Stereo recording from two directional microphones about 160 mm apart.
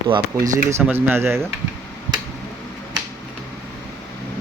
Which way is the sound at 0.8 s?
10° right (ahead or behind).